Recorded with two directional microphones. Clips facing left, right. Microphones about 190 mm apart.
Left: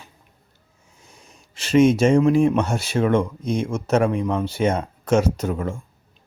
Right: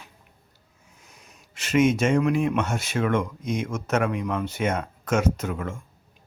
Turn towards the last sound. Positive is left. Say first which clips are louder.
# left 5 dB
turn(degrees=35)  # may be behind; listen again after turning